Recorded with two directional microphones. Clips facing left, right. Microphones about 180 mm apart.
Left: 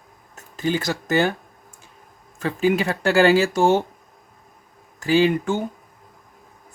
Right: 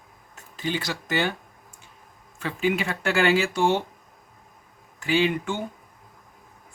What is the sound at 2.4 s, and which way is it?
Speech, 40° left (ahead or behind).